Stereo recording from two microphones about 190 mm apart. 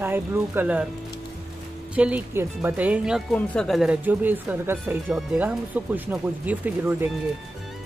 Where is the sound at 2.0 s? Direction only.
5° right (ahead or behind).